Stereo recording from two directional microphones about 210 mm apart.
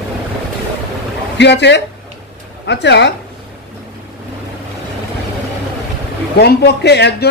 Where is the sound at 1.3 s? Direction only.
55° left (ahead or behind).